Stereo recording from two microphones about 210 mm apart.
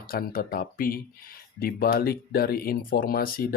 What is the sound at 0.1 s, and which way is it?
Speech, 45° left (ahead or behind).